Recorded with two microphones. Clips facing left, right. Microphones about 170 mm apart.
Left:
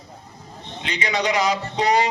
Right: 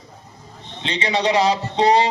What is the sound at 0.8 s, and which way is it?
A man's voice, 30° right (ahead or behind).